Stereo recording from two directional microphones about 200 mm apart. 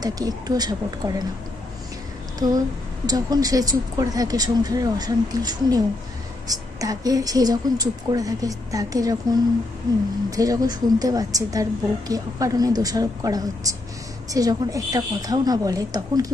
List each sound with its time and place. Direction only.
0.0 s speech: 20° right (ahead or behind)
2.4 s a woman's voice: 20° right (ahead or behind)